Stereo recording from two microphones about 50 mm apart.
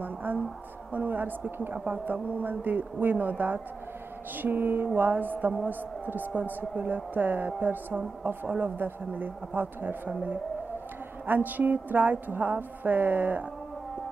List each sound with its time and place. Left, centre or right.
0.0 s a woman's voice: right
4.4 s a sound: right
4.8 s a woman's voice: right
11.2 s a woman's voice: right